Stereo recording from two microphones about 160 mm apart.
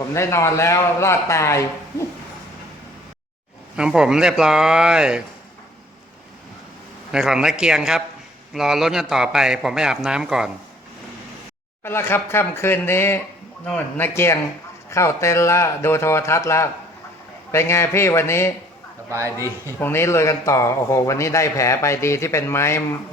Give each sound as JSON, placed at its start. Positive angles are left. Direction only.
{"t": 0.1, "sound": "a man's voice", "side_deg": 20}
{"t": 3.8, "sound": "a man's voice", "side_deg": -5}
{"t": 7.1, "sound": "a man's voice", "side_deg": -5}
{"t": 11.8, "sound": "a man's voice", "side_deg": 15}
{"t": 19.1, "sound": "a man's voice", "side_deg": -15}
{"t": 19.8, "sound": "a man's voice", "side_deg": 15}